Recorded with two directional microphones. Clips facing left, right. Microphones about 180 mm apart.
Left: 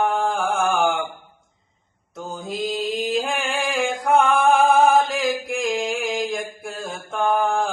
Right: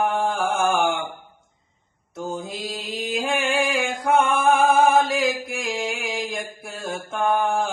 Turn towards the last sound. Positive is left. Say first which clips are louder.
# left 1 dB
turn(degrees=0)  # may be behind; listen again after turning